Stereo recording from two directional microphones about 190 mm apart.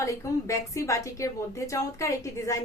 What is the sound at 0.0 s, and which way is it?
A woman's voice, 15° left (ahead or behind).